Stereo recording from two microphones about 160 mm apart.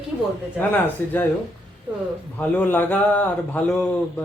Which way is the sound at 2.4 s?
10° left (ahead or behind).